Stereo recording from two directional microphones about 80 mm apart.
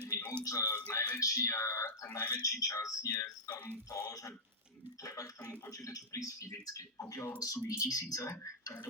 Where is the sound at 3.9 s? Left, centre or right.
Left.